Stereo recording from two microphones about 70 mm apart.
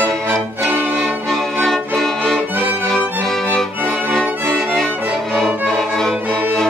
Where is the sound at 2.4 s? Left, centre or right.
Right.